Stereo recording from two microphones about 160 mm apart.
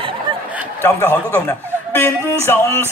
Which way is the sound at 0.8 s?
15° left (ahead or behind).